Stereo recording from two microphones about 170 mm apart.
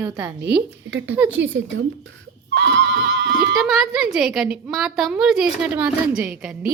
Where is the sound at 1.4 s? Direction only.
90° right.